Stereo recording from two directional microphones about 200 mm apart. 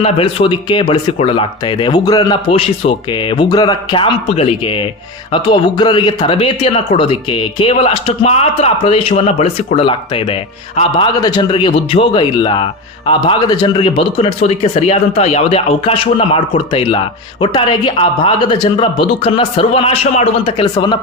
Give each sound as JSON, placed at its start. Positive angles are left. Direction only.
{"t": 0.0, "sound": "speech", "side_deg": 25}